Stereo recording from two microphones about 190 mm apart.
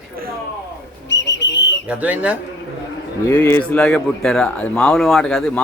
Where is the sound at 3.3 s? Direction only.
10° left (ahead or behind).